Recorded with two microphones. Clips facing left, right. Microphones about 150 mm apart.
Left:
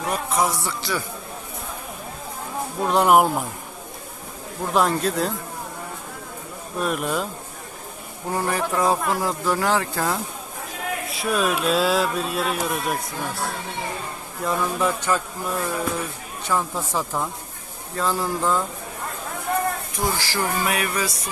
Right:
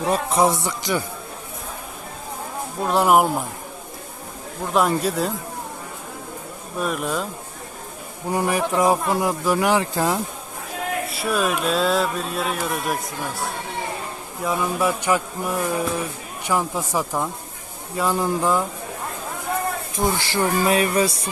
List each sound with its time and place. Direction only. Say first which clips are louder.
0.1 s speech: right 4 dB; 30° right (ahead or behind)
2.8 s speech: even; centre (ahead or behind)
4.7 s speech: right 1 dB; 5° right (ahead or behind)
6.7 s speech: even; centre (ahead or behind)
8.3 s speech: right 2 dB; 15° right (ahead or behind)
11.1 s speech: left 1 dB; centre (ahead or behind)
14.4 s speech: right 1 dB; 5° right (ahead or behind)
20.0 s speech: right 4 dB; 25° right (ahead or behind)